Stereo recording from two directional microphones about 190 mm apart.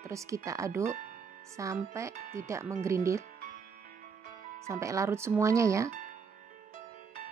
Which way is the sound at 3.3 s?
45° right (ahead or behind).